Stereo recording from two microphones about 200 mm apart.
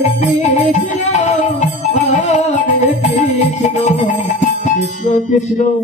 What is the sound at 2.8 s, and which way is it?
Music, 35° left (ahead or behind).